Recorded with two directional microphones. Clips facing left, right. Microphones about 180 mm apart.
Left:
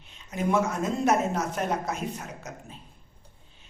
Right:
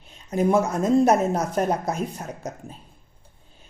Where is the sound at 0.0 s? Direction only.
35° right (ahead or behind).